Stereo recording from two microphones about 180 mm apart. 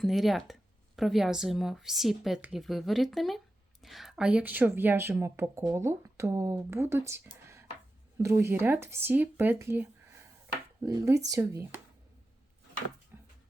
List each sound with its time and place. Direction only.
0.0 s a woman's voice: centre (ahead or behind)